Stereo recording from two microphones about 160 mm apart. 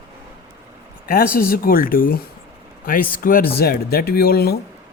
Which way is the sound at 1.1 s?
65° left (ahead or behind).